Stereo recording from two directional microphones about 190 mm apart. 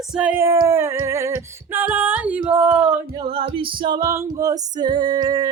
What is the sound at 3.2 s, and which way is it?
A capella, 25° right (ahead or behind).